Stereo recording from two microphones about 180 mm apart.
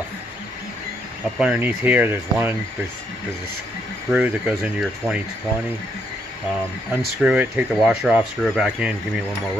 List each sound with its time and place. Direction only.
1.4 s speech: 10° right (ahead or behind)
4.1 s speech: 5° right (ahead or behind)
7.2 s speech: 5° right (ahead or behind)